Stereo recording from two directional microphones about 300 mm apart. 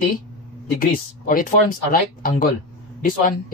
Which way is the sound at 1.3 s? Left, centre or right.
Left.